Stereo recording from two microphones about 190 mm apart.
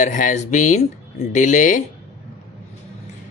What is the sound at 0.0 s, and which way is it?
Speech, 40° left (ahead or behind).